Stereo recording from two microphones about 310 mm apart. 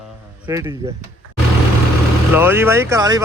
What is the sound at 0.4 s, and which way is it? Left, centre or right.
Speech, centre.